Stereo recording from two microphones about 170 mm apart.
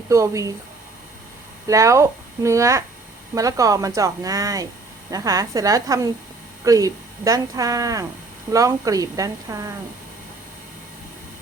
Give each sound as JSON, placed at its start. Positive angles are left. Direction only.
{"t": 0.1, "sound": "a woman's voice", "side_deg": -20}
{"t": 1.6, "sound": "a woman's voice", "side_deg": -20}